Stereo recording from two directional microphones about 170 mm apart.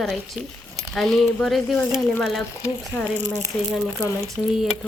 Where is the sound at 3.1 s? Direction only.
45° right (ahead or behind).